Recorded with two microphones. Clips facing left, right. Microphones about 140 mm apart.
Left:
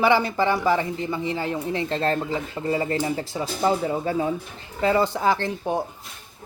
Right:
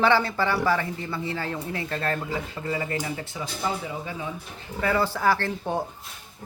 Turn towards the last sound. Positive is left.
turn(degrees=15)  # may be behind; listen again after turning